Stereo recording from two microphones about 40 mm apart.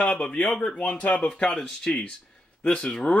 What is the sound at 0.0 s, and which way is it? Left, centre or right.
Speech, left.